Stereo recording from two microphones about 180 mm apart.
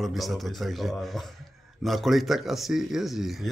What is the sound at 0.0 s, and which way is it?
A man's voice, centre (ahead or behind).